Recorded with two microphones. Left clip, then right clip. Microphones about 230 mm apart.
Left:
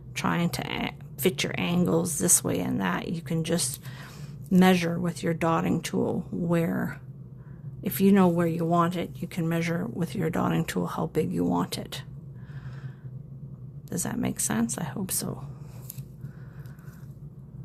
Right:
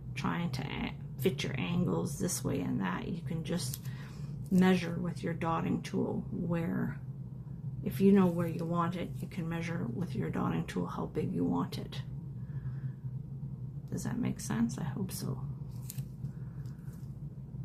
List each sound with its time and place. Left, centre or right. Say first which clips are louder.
0.2 s speech: left 9 dB; left
4.6 s speech: left 8 dB; left
13.9 s speech: left 7 dB; left